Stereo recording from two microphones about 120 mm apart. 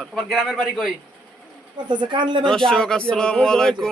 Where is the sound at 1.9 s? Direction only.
40° right (ahead or behind).